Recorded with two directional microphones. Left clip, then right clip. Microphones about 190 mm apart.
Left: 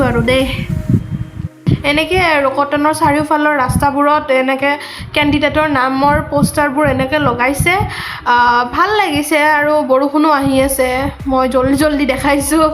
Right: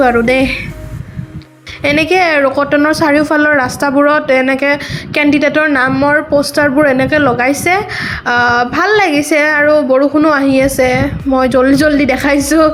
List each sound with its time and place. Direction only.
0.0 s a woman's voice: 20° right (ahead or behind)
1.8 s a woman's voice: 20° right (ahead or behind)
5.9 s speech: 5° right (ahead or behind)